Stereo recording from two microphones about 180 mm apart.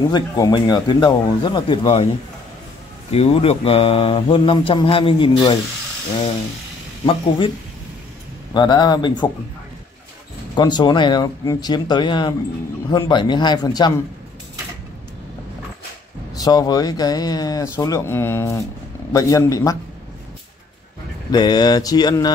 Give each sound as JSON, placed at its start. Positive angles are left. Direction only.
{"t": 0.1, "sound": "speech", "side_deg": 20}
{"t": 3.1, "sound": "speech", "side_deg": 35}
{"t": 7.1, "sound": "speech", "side_deg": 30}
{"t": 8.5, "sound": "speech", "side_deg": 25}
{"t": 10.5, "sound": "speech", "side_deg": 25}
{"t": 16.3, "sound": "speech", "side_deg": 20}
{"t": 21.3, "sound": "speech", "side_deg": 25}